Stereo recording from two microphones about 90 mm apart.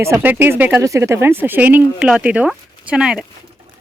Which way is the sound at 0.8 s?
35° right (ahead or behind).